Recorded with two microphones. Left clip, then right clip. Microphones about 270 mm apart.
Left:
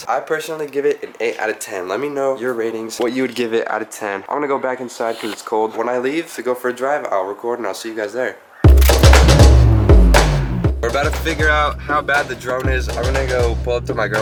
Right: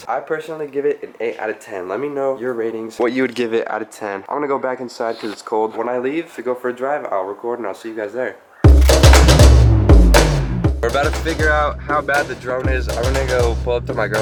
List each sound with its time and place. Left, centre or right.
0.1 s speech: centre
5.5 s speech: right
5.7 s speech: centre
6.5 s speech: centre
7.7 s speech: centre
8.6 s music: centre
10.8 s music: centre
11.0 s speech: centre